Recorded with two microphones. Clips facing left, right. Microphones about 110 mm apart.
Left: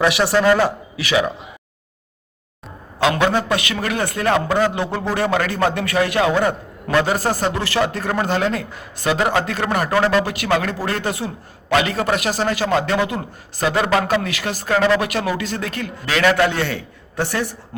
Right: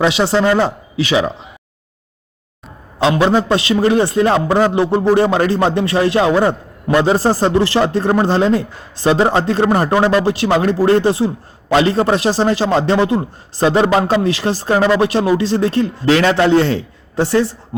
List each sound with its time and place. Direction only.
0.0 s a man's voice: 25° right (ahead or behind)
3.0 s a man's voice: 30° right (ahead or behind)